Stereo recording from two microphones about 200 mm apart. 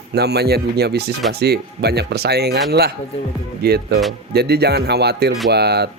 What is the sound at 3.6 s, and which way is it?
Speech, 50° right (ahead or behind).